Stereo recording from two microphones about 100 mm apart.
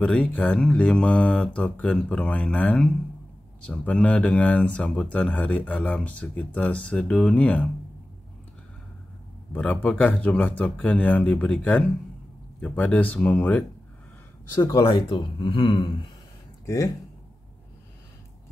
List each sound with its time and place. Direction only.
0.0 s speech: 15° left (ahead or behind)
9.5 s speech: 15° left (ahead or behind)
14.8 s a man's voice: 55° left (ahead or behind)
16.6 s speech: 30° left (ahead or behind)